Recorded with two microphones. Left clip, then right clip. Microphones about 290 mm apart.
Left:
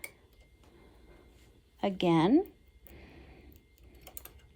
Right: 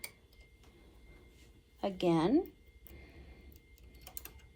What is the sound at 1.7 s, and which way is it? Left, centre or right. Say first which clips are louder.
Speech: left 4 dB; left.